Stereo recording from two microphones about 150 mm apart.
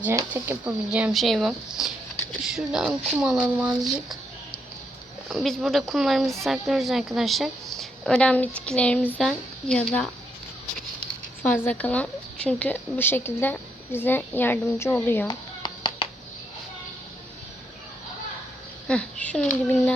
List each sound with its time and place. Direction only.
0.2 s speech: 15° right (ahead or behind)
0.9 s speech: 5° right (ahead or behind)
5.3 s speech: centre (ahead or behind)
11.1 s speech: 10° left (ahead or behind)
15.3 s a sound: 30° left (ahead or behind)
18.9 s speech: 10° left (ahead or behind)